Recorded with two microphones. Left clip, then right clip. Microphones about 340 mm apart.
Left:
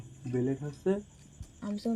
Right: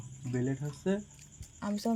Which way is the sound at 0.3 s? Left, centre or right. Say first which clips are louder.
Left 3 dB; right.